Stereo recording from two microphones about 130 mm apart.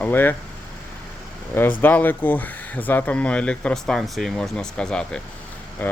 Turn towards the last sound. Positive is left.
turn(degrees=5)  # may be behind; listen again after turning